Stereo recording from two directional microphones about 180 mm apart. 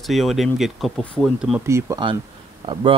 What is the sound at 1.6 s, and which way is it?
Speech, 15° right (ahead or behind).